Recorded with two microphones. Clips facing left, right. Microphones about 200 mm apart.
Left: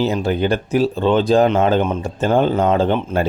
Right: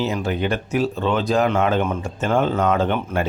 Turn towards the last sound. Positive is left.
turn(degrees=30)  # may be behind; listen again after turning